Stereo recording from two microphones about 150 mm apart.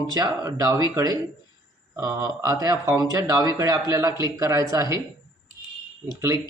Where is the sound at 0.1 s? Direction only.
25° right (ahead or behind).